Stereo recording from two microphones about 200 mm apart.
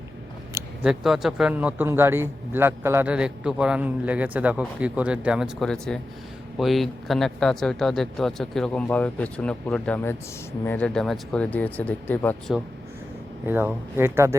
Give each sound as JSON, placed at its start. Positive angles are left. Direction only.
{"t": 0.5, "sound": "speech", "side_deg": -5}
{"t": 13.4, "sound": "speech", "side_deg": -10}